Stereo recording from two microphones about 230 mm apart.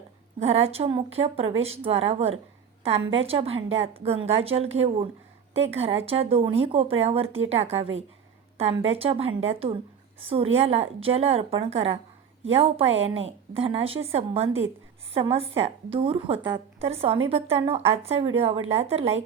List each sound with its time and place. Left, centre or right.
0.3 s speech: right